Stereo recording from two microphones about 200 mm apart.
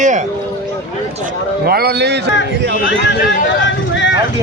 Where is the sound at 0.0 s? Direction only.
35° right (ahead or behind).